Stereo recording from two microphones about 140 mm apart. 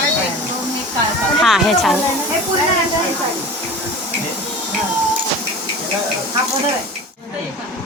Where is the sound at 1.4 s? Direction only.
Centre (ahead or behind).